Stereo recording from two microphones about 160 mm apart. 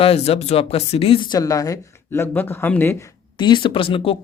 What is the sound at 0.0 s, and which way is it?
Speech, 40° left (ahead or behind).